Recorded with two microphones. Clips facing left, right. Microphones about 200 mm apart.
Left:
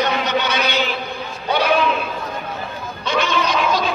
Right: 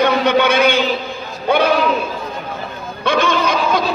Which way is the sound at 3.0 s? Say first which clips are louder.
Right 4 dB; 55° right (ahead or behind).